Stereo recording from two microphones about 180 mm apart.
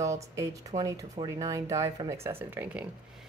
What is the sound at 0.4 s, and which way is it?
Speech, 20° right (ahead or behind).